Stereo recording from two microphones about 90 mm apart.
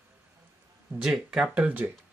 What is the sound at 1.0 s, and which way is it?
Speech, 5° right (ahead or behind).